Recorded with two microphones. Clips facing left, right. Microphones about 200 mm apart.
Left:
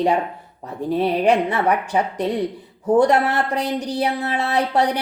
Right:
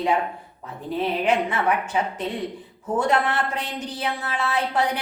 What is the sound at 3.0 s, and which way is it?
A woman's voice, 40° left (ahead or behind).